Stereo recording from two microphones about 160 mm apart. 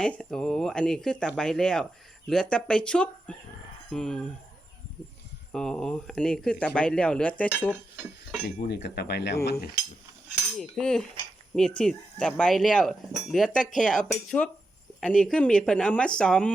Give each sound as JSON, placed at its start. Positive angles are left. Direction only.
{"t": 0.0, "sound": "speech", "side_deg": 5}
{"t": 5.5, "sound": "speech", "side_deg": 5}
{"t": 8.4, "sound": "a sound", "side_deg": 90}
{"t": 10.6, "sound": "speech", "side_deg": 5}